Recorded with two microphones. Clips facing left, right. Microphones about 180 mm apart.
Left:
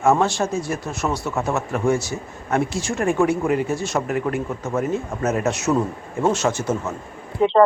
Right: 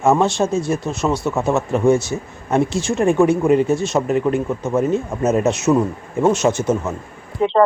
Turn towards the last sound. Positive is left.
turn(degrees=0)  # may be behind; listen again after turning